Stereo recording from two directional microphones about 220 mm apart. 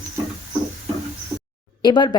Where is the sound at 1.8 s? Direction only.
20° left (ahead or behind).